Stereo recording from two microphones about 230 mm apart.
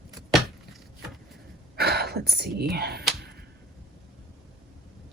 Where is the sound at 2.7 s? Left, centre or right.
Right.